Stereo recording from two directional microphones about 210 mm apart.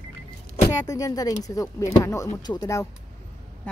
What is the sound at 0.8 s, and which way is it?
Speech, 15° left (ahead or behind).